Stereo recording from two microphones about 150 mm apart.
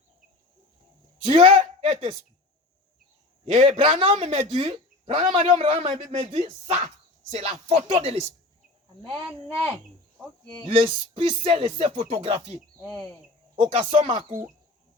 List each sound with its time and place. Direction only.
1.2 s speech: 40° right (ahead or behind)
3.4 s speech: 40° right (ahead or behind)
10.7 s speech: 40° right (ahead or behind)
13.6 s speech: 40° right (ahead or behind)